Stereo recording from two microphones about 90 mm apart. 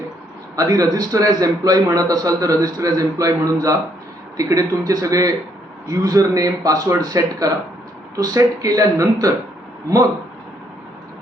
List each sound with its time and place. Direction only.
0.5 s a man's voice: 40° right (ahead or behind)